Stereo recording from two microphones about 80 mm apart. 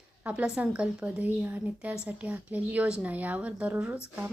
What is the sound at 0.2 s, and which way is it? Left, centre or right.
A woman's voice, centre.